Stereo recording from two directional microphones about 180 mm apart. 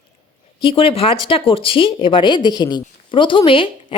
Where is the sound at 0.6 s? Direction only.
30° left (ahead or behind).